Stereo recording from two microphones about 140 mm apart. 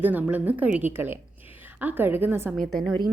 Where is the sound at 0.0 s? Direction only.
10° right (ahead or behind).